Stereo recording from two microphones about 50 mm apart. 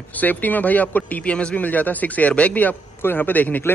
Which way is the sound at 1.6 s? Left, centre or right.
Left.